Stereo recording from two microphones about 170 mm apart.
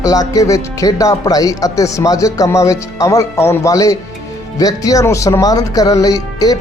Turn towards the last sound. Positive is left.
turn(degrees=20)  # may be behind; listen again after turning